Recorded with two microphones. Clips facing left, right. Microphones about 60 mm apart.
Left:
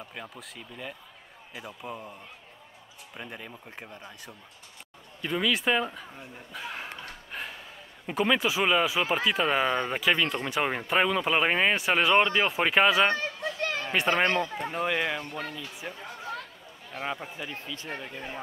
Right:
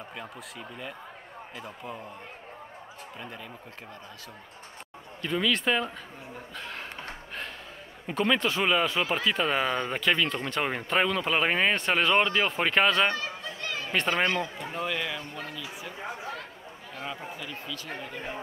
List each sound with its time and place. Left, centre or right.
0.1 s speech: centre
1.6 s speech: centre
3.2 s speech: centre
5.2 s speech: centre
8.1 s speech: centre
13.6 s chatter: left
13.9 s speech: centre
14.6 s speech: left
16.0 s speech: right
16.9 s a man's voice: left
17.9 s speech: right